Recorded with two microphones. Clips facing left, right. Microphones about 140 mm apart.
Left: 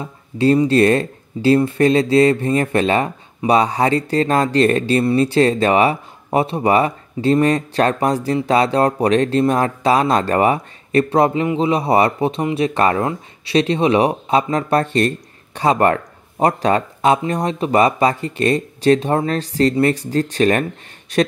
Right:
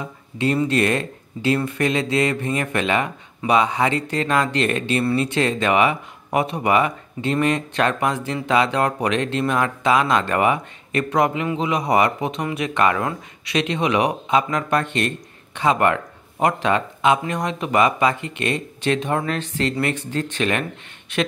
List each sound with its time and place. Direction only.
0.7 s speech: 35° left (ahead or behind)